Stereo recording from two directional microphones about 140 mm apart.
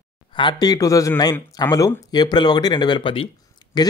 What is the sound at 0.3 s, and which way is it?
Speech, 35° left (ahead or behind).